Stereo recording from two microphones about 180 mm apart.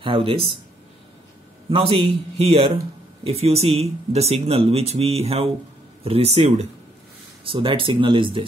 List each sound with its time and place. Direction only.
0.0 s speech: 30° right (ahead or behind)
1.7 s speech: 30° right (ahead or behind)